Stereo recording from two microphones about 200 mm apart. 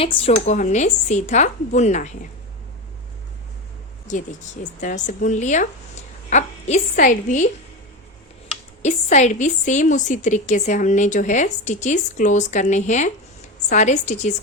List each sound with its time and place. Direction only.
0.0 s a woman's voice: 30° left (ahead or behind)
4.1 s a woman's voice: 40° left (ahead or behind)
8.8 s a woman's voice: 35° left (ahead or behind)